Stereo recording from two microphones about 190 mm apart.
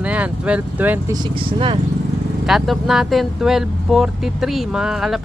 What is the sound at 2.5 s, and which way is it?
Speech, centre (ahead or behind).